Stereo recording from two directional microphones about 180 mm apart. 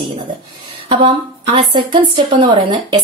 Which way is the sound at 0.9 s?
30° right (ahead or behind).